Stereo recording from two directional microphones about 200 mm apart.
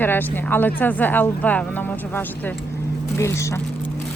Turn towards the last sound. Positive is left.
turn(degrees=15)  # may be behind; listen again after turning